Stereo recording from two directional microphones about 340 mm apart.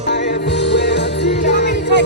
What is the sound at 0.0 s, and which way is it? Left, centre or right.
Music, left.